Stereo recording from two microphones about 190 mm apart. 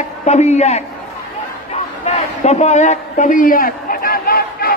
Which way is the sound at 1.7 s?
35° left (ahead or behind).